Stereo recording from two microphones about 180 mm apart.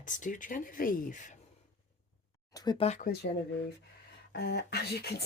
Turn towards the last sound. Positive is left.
turn(degrees=60)  # may be behind; listen again after turning